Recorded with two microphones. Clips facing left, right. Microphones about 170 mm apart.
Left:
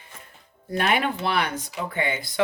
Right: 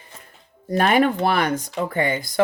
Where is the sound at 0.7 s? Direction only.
45° right (ahead or behind).